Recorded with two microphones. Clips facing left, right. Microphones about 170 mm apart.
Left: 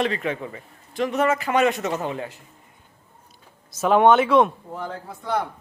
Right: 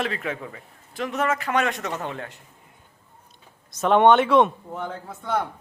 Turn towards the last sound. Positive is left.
turn(degrees=-5)  # may be behind; listen again after turning